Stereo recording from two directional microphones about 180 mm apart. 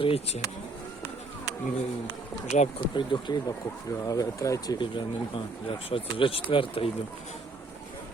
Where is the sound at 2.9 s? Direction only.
25° left (ahead or behind).